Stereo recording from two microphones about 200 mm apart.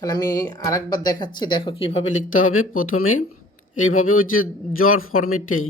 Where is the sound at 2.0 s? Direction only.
75° left (ahead or behind).